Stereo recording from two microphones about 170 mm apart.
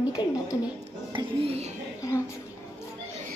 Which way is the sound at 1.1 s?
35° right (ahead or behind).